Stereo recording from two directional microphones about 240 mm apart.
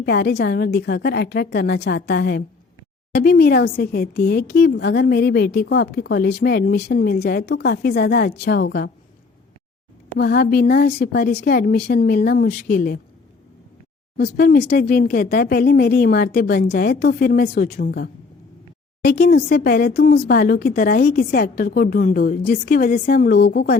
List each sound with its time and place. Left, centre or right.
0.0 s a woman's voice: left
10.1 s speech: left
14.3 s speech: left